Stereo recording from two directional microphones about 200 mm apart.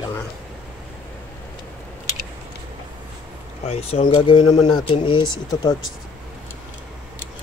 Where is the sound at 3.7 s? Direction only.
30° left (ahead or behind).